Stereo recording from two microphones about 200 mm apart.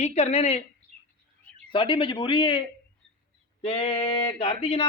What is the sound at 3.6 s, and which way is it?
Speech, 30° left (ahead or behind).